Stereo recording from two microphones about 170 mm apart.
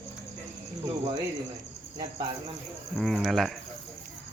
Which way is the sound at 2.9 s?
Centre (ahead or behind).